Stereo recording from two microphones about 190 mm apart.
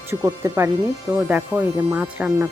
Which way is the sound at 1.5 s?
10° left (ahead or behind).